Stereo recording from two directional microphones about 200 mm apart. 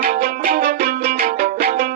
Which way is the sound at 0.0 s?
50° right (ahead or behind).